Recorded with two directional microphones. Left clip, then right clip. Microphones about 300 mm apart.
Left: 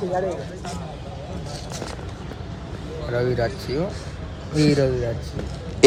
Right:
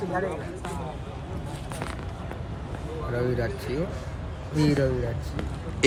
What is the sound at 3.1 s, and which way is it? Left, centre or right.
Speech, centre.